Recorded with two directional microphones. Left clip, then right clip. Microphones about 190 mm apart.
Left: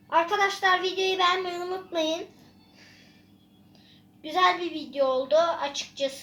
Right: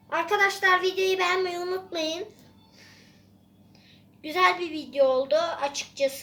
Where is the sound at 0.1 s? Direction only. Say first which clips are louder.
Even; 15° right (ahead or behind).